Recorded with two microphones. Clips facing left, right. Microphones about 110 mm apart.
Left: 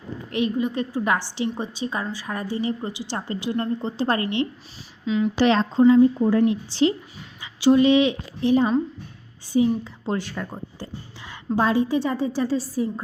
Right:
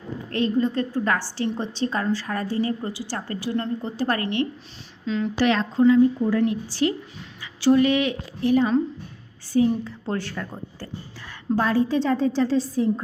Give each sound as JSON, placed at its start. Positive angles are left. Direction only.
{"t": 0.3, "sound": "a woman's voice", "side_deg": 15}
{"t": 5.0, "sound": "a woman's voice", "side_deg": 5}
{"t": 5.4, "sound": "a woman's voice", "side_deg": 25}